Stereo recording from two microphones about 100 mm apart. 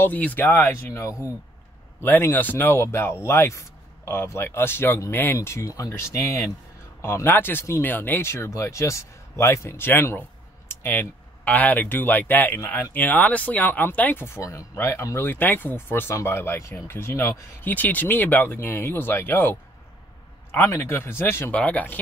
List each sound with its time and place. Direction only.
0.0 s speech: 15° left (ahead or behind)
20.5 s speech: 25° left (ahead or behind)